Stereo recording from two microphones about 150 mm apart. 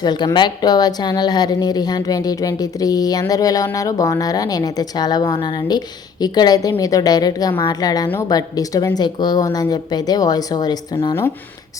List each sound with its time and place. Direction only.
0.0 s a woman's voice: 30° left (ahead or behind)